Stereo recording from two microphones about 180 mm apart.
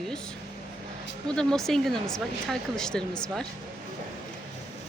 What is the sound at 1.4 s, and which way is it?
Speech, 5° left (ahead or behind).